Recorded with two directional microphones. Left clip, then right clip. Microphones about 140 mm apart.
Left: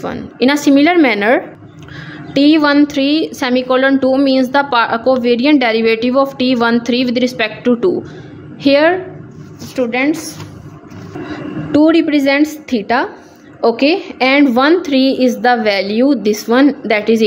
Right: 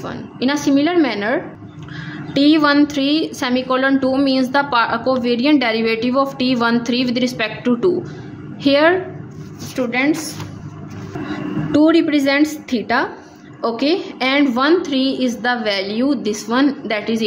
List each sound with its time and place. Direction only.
0.0 s a woman's voice: 40° left (ahead or behind)
9.8 s a woman's voice: 40° left (ahead or behind)
11.7 s a woman's voice: 30° left (ahead or behind)